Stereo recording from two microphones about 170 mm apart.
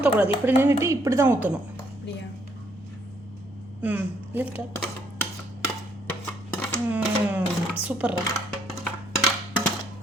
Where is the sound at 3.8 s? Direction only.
10° right (ahead or behind).